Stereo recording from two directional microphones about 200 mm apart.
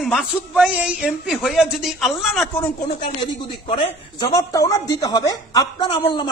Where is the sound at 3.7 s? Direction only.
25° left (ahead or behind).